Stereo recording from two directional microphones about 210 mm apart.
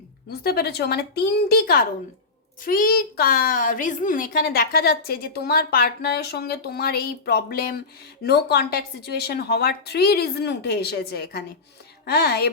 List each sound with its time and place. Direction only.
0.3 s a woman's voice: 45° left (ahead or behind)